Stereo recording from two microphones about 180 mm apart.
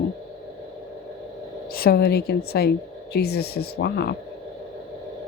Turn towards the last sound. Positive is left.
turn(degrees=65)  # may be behind; listen again after turning